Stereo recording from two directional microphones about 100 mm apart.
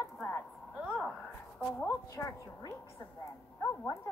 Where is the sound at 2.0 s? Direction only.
35° left (ahead or behind).